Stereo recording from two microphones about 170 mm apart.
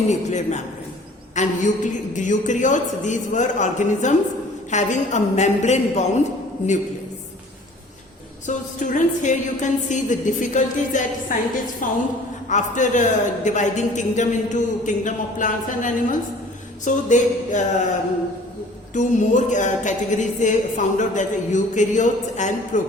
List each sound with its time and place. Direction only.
0.1 s a woman's voice: 45° left (ahead or behind)
8.4 s a woman's voice: 50° left (ahead or behind)
18.9 s a woman's voice: 45° left (ahead or behind)